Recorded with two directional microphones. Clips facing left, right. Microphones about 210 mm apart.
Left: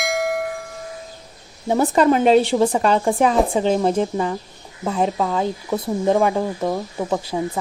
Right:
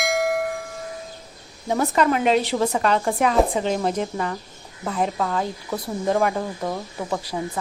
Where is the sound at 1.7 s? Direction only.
30° left (ahead or behind).